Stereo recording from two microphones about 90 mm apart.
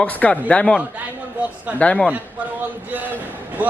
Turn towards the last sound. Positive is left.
turn(degrees=-15)  # may be behind; listen again after turning